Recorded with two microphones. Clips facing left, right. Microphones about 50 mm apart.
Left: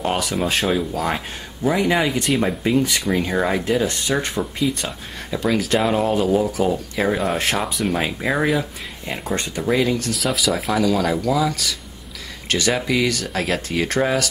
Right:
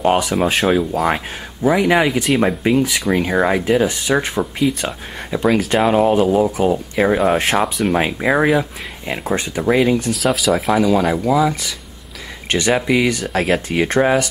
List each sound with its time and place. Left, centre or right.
0.4 s speech: centre
1.0 s speech: centre
3.3 s speech: centre
7.5 s speech: centre
7.9 s speech: centre
9.2 s speech: centre
9.6 s speech: centre
10.1 s speech: centre
10.7 s speech: centre
13.3 s speech: centre
13.7 s speech: right